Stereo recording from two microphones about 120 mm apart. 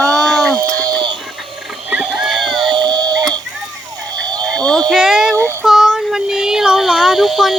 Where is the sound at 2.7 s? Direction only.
35° right (ahead or behind).